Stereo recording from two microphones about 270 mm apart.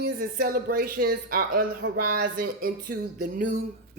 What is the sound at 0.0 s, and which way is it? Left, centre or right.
A woman's voice, right.